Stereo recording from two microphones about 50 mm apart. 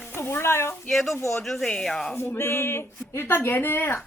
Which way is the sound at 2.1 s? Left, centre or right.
Left.